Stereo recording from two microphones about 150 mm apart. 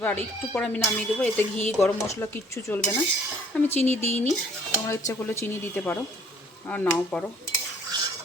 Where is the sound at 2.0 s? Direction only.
20° left (ahead or behind).